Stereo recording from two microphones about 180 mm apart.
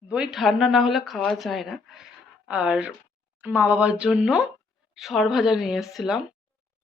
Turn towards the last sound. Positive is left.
turn(degrees=0)  # may be behind; listen again after turning